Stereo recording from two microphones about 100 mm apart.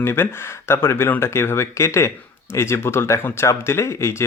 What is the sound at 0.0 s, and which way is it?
Speech, 25° left (ahead or behind).